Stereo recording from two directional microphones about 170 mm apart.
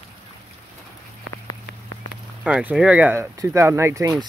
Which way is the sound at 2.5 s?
5° right (ahead or behind).